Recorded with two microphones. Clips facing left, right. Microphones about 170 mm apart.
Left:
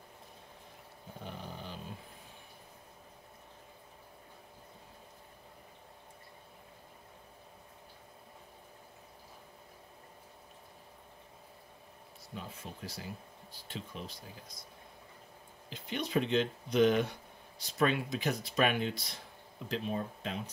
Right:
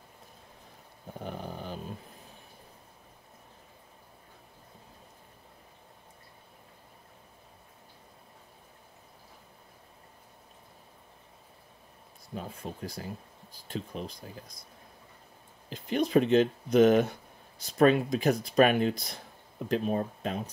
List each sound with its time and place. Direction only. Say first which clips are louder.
1.2 s dog: right 6 dB; 50° right (ahead or behind)
12.4 s speech: right 6 dB; 45° right (ahead or behind)
15.7 s speech: right 8 dB; 40° right (ahead or behind)